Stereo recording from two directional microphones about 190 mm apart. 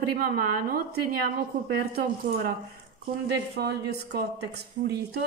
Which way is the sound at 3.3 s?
60° right (ahead or behind).